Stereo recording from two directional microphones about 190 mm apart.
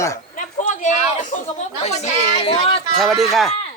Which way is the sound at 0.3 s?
40° left (ahead or behind).